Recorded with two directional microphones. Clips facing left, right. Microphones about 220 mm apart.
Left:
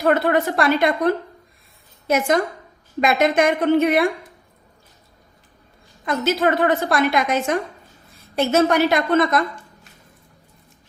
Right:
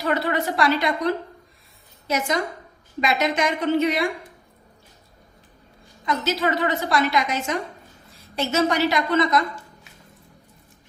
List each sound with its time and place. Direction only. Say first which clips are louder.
0.0 s a woman's voice: left 6 dB; 50° left (ahead or behind)
6.1 s a woman's voice: left 4 dB; 55° left (ahead or behind)